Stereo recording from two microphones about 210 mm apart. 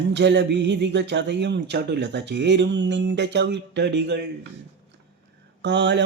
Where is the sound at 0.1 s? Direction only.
55° right (ahead or behind).